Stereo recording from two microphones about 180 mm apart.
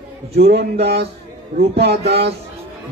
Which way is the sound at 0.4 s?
65° right (ahead or behind).